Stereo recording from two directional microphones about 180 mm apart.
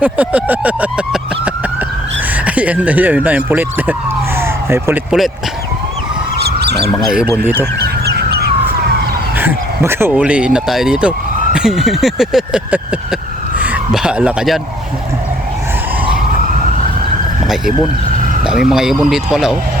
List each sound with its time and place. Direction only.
0.0 s speech: 10° right (ahead or behind)
4.4 s a sound: 15° right (ahead or behind)
6.4 s emergency vehicle: 65° right (ahead or behind)
7.0 s vehicle: 5° right (ahead or behind)
7.4 s speech: 10° right (ahead or behind)
7.8 s bird: 65° right (ahead or behind)
9.4 s a sound: 10° right (ahead or behind)
10.1 s vehicle: 5° right (ahead or behind)
13.6 s speech: 5° right (ahead or behind)
18.4 s vehicle: 5° right (ahead or behind)